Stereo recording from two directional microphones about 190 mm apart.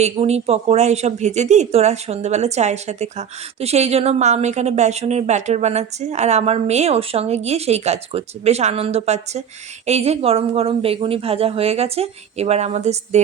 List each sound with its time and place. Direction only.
0.0 s a woman's voice: 35° right (ahead or behind)